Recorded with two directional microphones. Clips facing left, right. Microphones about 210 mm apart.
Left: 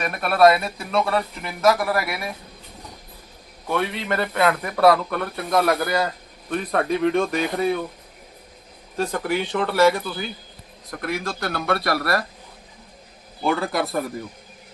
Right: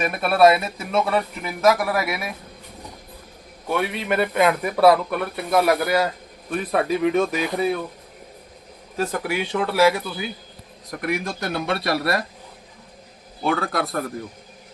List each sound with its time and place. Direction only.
0.0 s a man's voice: 5° right (ahead or behind)
3.7 s a man's voice: 10° right (ahead or behind)
9.0 s a man's voice: 5° right (ahead or behind); by 12.2 s 25° right (ahead or behind)
13.4 s a man's voice: centre (ahead or behind)